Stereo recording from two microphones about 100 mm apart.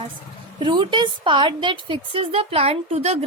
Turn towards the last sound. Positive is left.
turn(degrees=-90)